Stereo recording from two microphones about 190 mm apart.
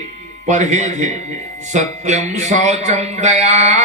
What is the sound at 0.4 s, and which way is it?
Speech, 40° right (ahead or behind).